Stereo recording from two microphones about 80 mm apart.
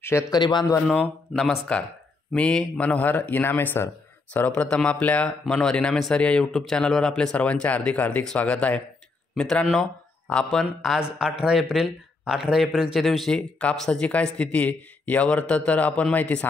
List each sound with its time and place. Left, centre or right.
0.3 s a man's voice: left
1.3 s a man's voice: centre; by 4.5 s left
4.5 s a man's voice: centre
11.0 s speech: centre
13.7 s a man's voice: centre